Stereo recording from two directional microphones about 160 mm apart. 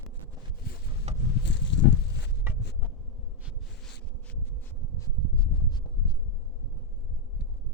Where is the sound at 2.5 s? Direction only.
15° right (ahead or behind).